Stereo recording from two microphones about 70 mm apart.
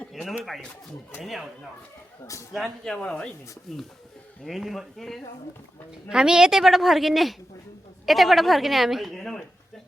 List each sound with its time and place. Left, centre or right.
0.1 s a sound: centre
1.2 s speech: centre
2.2 s speech: left
2.5 s speech: centre
6.1 s speech: centre